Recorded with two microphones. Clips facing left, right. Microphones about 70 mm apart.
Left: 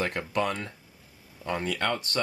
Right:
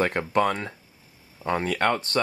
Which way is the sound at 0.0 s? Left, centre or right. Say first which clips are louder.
Right 6 dB; right.